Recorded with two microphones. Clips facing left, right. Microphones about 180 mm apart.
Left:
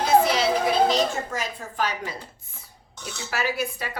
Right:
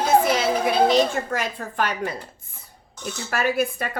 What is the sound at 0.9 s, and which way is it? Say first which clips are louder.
A woman's voice: right 4 dB; 60° right (ahead or behind).